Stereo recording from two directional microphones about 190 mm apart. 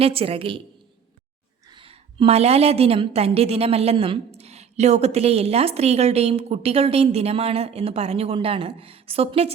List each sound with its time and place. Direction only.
0.0 s a woman's voice: 30° right (ahead or behind)
1.7 s a woman's voice: 30° right (ahead or behind)